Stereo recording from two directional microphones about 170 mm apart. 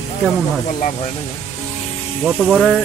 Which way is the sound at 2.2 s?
5° right (ahead or behind).